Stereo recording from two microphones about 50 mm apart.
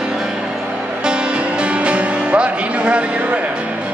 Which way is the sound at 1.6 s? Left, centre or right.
Right.